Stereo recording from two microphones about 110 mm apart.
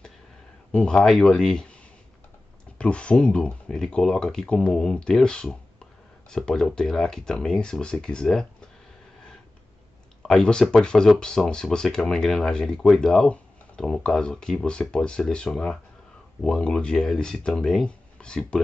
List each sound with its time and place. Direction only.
0.7 s speech: 10° left (ahead or behind)
2.8 s speech: 10° left (ahead or behind)
10.2 s speech: 5° left (ahead or behind)